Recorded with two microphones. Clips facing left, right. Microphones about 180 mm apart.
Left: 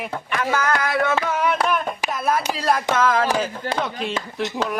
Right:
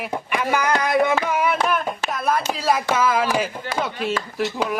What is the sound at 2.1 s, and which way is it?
Speech, centre (ahead or behind).